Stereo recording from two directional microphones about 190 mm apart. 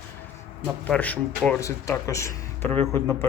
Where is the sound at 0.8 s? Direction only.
10° left (ahead or behind).